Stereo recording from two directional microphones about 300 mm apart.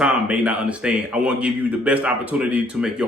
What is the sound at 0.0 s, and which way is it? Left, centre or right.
A man's voice, centre.